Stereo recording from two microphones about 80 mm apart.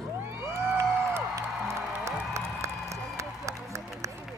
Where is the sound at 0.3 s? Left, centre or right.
Right.